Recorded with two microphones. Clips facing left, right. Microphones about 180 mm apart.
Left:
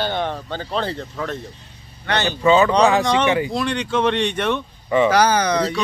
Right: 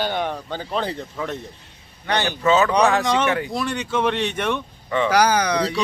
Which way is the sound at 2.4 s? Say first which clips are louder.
Left 3 dB; centre (ahead or behind).